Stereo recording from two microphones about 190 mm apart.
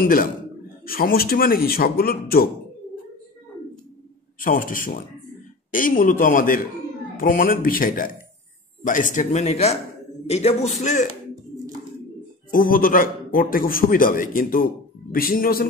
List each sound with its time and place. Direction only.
0.0 s a man's voice: 50° left (ahead or behind)
4.4 s a man's voice: 45° left (ahead or behind)
12.4 s a man's voice: 45° left (ahead or behind)